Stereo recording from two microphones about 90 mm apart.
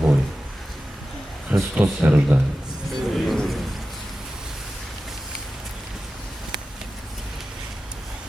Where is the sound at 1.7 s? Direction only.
15° right (ahead or behind).